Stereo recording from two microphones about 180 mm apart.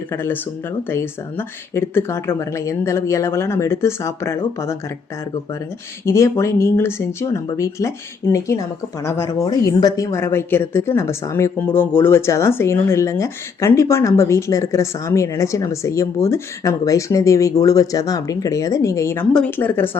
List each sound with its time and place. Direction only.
0.1 s a woman's voice: 15° left (ahead or behind)
6.1 s a woman's voice: 15° left (ahead or behind)